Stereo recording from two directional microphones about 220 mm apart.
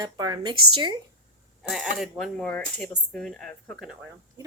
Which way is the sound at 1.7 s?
Centre (ahead or behind).